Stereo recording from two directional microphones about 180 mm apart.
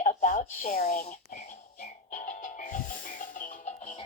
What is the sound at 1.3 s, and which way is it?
Music, 45° left (ahead or behind).